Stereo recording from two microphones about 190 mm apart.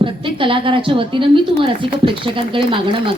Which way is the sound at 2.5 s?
25° right (ahead or behind).